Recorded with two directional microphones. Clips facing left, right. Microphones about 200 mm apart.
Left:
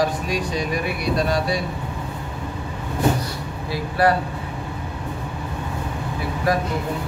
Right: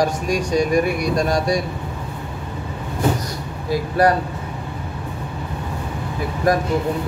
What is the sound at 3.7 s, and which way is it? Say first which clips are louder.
Speech: right 3 dB; 45° right (ahead or behind).